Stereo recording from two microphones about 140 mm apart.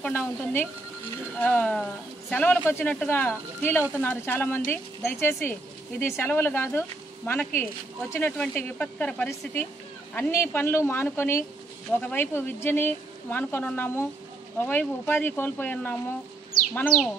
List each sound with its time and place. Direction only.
0.0 s speech: 15° left (ahead or behind)